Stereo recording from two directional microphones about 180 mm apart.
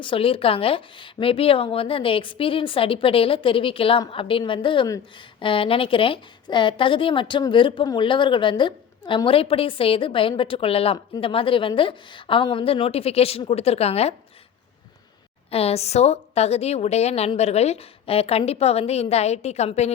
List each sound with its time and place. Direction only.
0.0 s a woman's voice: 30° left (ahead or behind)
15.4 s a woman's voice: 35° left (ahead or behind)